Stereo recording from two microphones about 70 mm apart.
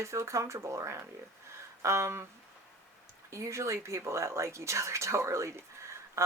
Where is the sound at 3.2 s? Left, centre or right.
Right.